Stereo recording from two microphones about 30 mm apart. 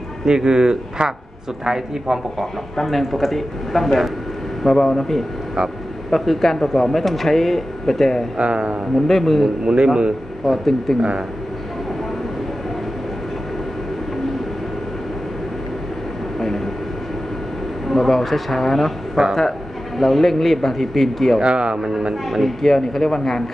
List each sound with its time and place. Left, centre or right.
0.2 s speech: right
2.8 s speech: centre
8.4 s speech: right
9.0 s speech: centre
11.0 s speech: right
16.3 s vehicle: centre
17.8 s speech: centre
19.2 s a man's voice: centre
20.0 s speech: centre
21.4 s speech: right
22.6 s speech: centre